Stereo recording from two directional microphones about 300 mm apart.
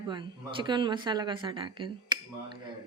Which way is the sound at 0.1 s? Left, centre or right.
Centre.